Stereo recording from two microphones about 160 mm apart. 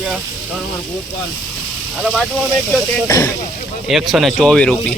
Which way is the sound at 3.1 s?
20° left (ahead or behind).